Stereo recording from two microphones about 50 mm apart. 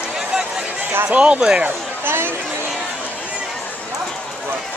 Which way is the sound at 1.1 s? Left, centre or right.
Right.